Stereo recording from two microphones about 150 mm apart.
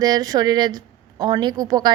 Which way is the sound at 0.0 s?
25° right (ahead or behind).